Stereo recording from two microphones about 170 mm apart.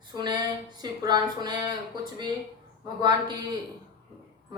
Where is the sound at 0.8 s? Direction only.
25° right (ahead or behind).